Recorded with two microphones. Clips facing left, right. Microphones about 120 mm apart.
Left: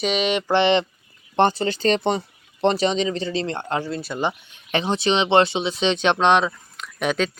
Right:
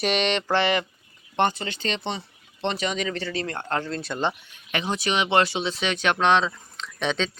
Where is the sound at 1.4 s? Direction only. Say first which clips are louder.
Left 5 dB; 35° left (ahead or behind); by 4.3 s 5° left (ahead or behind).